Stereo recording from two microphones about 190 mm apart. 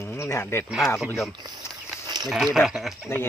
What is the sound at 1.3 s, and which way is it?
Speech, 20° right (ahead or behind).